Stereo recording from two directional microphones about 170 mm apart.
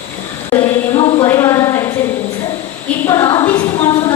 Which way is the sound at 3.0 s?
20° left (ahead or behind).